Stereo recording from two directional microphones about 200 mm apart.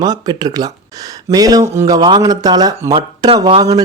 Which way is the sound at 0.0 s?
20° right (ahead or behind).